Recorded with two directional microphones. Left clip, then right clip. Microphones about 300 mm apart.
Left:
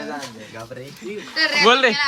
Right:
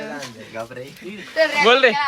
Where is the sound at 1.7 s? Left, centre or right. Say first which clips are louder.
Right 1 dB; centre.